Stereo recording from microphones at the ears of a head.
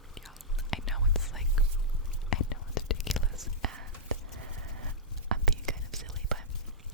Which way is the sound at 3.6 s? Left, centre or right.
Right.